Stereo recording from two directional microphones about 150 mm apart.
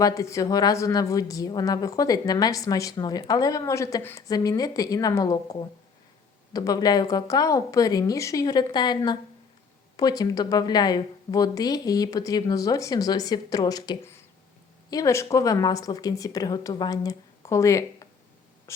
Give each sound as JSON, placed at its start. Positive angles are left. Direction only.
{"t": 0.0, "sound": "a woman's voice", "side_deg": 20}